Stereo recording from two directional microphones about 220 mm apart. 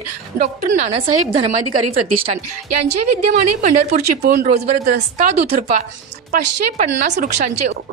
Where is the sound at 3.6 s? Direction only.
40° right (ahead or behind).